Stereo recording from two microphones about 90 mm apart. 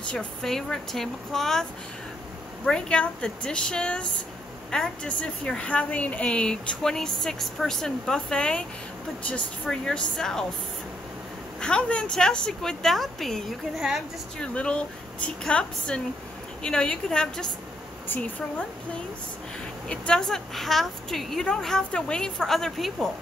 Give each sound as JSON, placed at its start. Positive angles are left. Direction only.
{"t": 0.0, "sound": "a woman's voice", "side_deg": 10}
{"t": 11.6, "sound": "a woman's voice", "side_deg": 10}
{"t": 14.4, "sound": "a woman's voice", "side_deg": 10}
{"t": 19.9, "sound": "a woman's voice", "side_deg": 10}